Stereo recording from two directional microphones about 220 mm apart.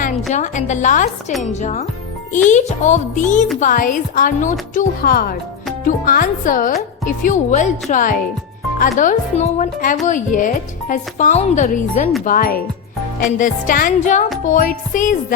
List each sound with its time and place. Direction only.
0.0 s speech: 35° left (ahead or behind)